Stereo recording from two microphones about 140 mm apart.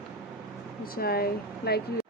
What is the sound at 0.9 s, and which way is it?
Speech, 90° left.